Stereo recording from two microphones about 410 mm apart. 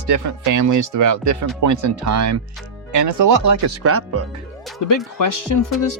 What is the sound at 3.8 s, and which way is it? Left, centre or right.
Speech, right.